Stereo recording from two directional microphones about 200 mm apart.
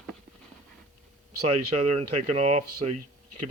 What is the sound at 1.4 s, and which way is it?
Speech, 30° right (ahead or behind).